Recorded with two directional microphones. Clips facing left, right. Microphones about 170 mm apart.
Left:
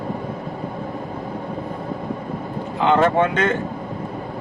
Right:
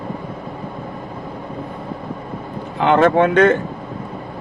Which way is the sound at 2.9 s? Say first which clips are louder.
Right 4 dB; 60° right (ahead or behind).